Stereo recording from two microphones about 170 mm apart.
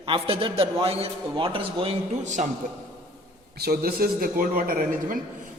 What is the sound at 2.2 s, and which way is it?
Speech, 45° right (ahead or behind).